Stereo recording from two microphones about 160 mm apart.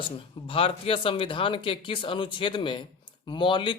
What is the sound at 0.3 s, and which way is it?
Speech, 35° left (ahead or behind).